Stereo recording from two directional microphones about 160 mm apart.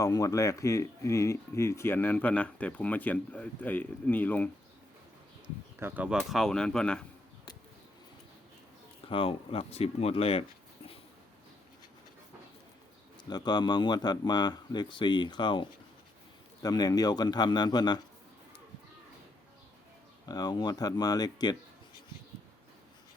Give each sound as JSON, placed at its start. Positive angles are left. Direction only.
{"t": 0.0, "sound": "speech", "side_deg": 20}
{"t": 5.8, "sound": "speech", "side_deg": -10}
{"t": 6.1, "sound": "speech", "side_deg": 0}
{"t": 9.0, "sound": "speech", "side_deg": 35}
{"t": 13.3, "sound": "speech", "side_deg": 25}
{"t": 20.2, "sound": "speech", "side_deg": 25}